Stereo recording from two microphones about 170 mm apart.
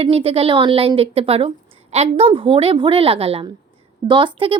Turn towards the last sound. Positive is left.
turn(degrees=-30)  # may be behind; listen again after turning